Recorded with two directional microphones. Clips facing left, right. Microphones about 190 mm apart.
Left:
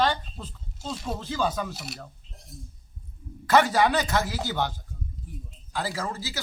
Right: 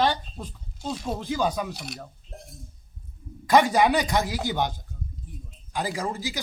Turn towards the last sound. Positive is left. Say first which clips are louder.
# right 3 dB
turn(degrees=-15)  # may be behind; listen again after turning